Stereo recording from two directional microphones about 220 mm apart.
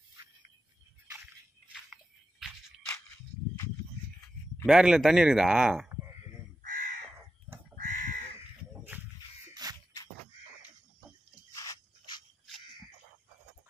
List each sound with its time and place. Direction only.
4.6 s speech: 5° right (ahead or behind)
6.6 s crow: 40° right (ahead or behind)
7.5 s bird: 10° right (ahead or behind)
7.8 s crow: 35° right (ahead or behind)
9.5 s music: 15° right (ahead or behind)
11.5 s a sound: 15° left (ahead or behind)